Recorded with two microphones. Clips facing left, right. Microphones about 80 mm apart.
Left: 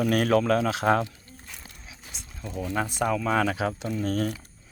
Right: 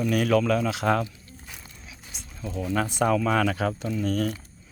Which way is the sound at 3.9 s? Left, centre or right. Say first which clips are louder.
Right 1 dB; left.